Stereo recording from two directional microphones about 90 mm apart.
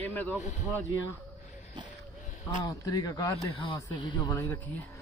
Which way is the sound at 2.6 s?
40° left (ahead or behind).